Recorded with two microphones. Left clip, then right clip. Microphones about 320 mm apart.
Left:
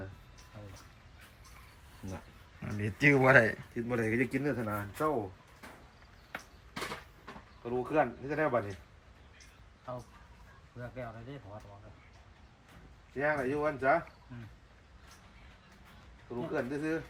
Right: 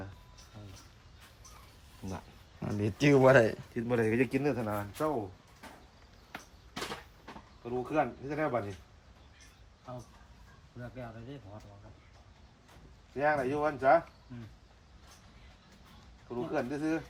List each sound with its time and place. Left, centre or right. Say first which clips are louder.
2.6 s speech: even; centre
3.8 s speech: right 4 dB; right
4.6 s speech: even; centre
6.3 s a sound: left 1 dB; centre
7.6 s speech: left 1 dB; centre
10.8 s speech: left 2 dB; centre
13.1 s speech: right 2 dB; centre
16.5 s speech: right 1 dB; centre